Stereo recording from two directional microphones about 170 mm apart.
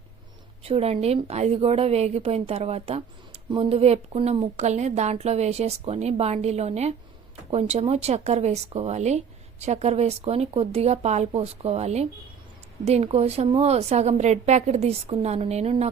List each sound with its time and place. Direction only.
0.6 s speech: 35° right (ahead or behind)